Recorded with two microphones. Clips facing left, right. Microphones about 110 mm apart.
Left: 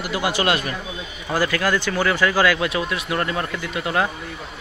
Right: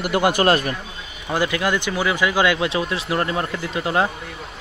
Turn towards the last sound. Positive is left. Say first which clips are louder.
# right 2 dB
turn(degrees=-25)  # may be behind; listen again after turning